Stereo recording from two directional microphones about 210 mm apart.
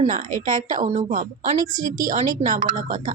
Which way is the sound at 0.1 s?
40° right (ahead or behind).